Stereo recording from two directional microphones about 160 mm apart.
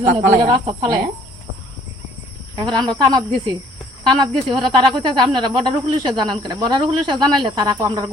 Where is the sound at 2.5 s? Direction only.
25° right (ahead or behind).